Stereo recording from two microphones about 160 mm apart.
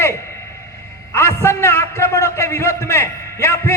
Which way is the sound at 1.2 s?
15° left (ahead or behind).